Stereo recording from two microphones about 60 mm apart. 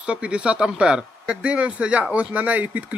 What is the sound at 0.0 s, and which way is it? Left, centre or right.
Speech, centre.